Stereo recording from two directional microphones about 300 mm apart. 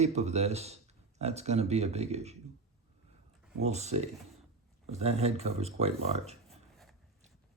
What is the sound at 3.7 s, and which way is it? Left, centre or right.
Speech, right.